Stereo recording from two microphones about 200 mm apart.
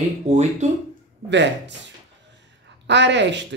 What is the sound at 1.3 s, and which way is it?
Speech, 60° right (ahead or behind).